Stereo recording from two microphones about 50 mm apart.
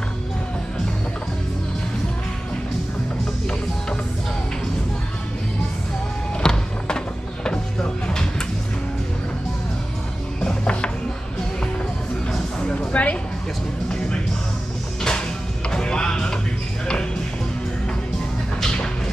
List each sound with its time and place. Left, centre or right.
6.4 s music: centre
7.4 s vehicle: centre
10.4 s music: centre
12.7 s a sound: left
15.0 s music: centre
18.6 s music: centre